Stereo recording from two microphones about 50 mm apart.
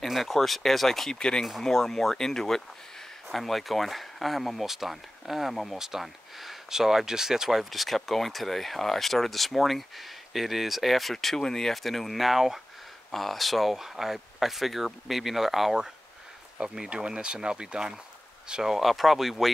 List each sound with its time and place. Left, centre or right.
0.0 s speech: centre